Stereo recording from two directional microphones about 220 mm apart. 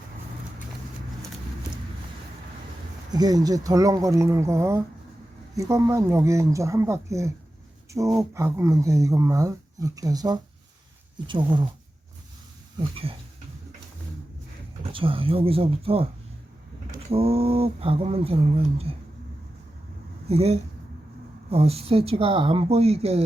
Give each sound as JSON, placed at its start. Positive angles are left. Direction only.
{"t": 3.1, "sound": "speech", "side_deg": -15}
{"t": 14.9, "sound": "speech", "side_deg": -25}
{"t": 17.1, "sound": "speech", "side_deg": -25}
{"t": 20.2, "sound": "speech", "side_deg": -30}